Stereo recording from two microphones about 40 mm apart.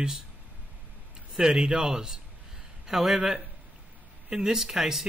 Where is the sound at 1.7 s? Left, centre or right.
Centre.